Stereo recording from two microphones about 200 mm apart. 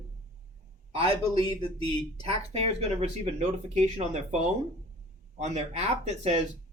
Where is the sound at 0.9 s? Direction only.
30° right (ahead or behind).